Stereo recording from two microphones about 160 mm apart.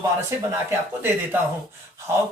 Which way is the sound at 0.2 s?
15° right (ahead or behind).